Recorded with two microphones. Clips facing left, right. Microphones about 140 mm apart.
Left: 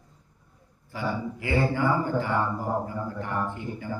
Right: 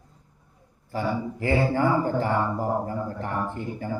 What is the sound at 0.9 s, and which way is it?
Speech, 40° right (ahead or behind).